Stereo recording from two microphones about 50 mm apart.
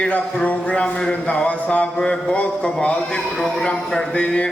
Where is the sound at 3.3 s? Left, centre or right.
Centre.